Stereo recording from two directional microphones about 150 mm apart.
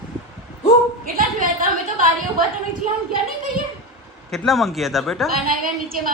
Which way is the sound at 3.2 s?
70° right (ahead or behind).